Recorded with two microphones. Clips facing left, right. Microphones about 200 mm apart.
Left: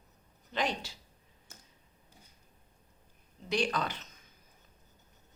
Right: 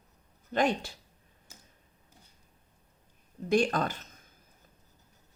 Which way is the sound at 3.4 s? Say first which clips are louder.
Right 6 dB; 50° right (ahead or behind).